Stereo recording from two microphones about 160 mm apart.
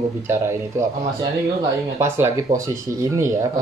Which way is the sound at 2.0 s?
15° right (ahead or behind).